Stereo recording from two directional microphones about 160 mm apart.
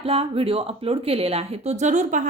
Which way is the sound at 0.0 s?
35° right (ahead or behind).